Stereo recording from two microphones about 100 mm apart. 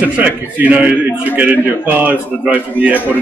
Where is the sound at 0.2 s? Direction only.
15° right (ahead or behind).